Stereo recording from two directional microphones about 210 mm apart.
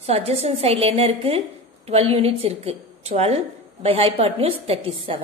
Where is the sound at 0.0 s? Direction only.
30° right (ahead or behind).